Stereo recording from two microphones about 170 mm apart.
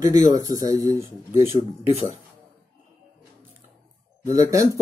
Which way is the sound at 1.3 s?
45° left (ahead or behind).